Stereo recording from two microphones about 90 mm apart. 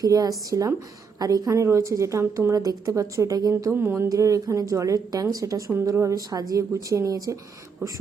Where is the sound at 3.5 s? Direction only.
30° right (ahead or behind).